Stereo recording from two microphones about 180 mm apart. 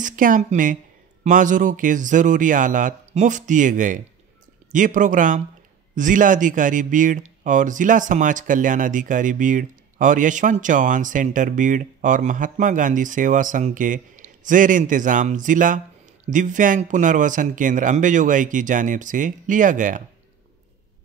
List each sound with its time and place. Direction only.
0.0 s speech: 50° right (ahead or behind)